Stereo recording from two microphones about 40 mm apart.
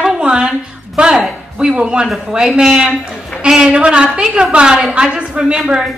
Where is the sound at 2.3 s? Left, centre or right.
Centre.